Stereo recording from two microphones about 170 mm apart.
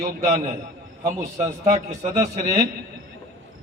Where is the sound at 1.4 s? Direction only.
40° right (ahead or behind).